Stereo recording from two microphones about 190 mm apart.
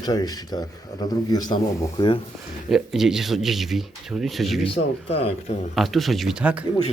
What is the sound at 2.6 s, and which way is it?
A man's voice, centre (ahead or behind).